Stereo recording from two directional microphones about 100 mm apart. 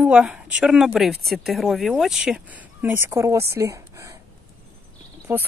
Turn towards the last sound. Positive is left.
turn(degrees=-15)  # may be behind; listen again after turning